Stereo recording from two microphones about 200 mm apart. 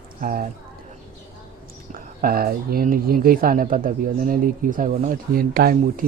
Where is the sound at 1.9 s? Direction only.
45° right (ahead or behind).